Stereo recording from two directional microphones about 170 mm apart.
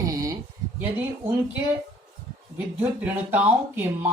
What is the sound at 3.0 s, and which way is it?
Speech, 10° right (ahead or behind).